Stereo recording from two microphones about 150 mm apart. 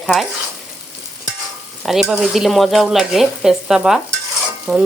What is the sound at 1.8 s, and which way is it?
Speech, centre (ahead or behind).